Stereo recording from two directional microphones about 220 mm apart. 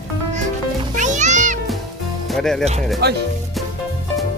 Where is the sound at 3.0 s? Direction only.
45° right (ahead or behind).